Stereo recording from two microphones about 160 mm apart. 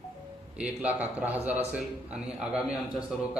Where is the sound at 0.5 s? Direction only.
10° right (ahead or behind).